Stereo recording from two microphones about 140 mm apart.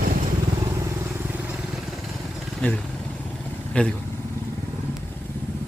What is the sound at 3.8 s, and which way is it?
Speech, 10° left (ahead or behind).